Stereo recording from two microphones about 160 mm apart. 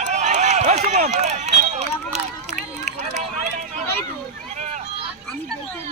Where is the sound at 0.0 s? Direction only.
50° right (ahead or behind).